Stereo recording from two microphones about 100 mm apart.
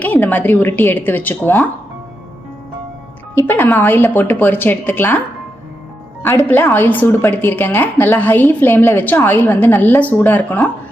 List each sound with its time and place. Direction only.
0.0 s a woman's voice: 20° left (ahead or behind)
3.3 s a woman's voice: 25° left (ahead or behind)
6.5 s a woman's voice: 20° left (ahead or behind)